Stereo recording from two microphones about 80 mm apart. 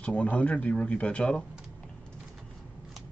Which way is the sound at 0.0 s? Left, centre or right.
Centre.